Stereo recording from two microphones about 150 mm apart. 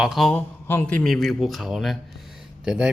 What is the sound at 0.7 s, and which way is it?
Speech, 10° left (ahead or behind).